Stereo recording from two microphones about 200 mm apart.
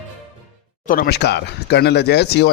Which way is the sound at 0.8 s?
50° left (ahead or behind).